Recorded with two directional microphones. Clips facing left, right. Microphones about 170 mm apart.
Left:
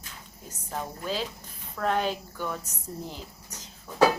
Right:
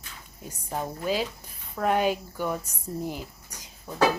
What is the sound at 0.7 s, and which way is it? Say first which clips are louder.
A woman's voice: right 4 dB; 10° right (ahead or behind).